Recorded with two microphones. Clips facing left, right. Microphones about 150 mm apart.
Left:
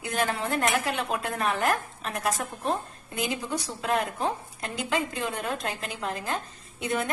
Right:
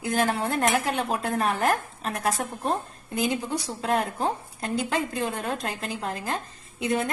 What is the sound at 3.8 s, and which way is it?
A woman's voice, 35° right (ahead or behind).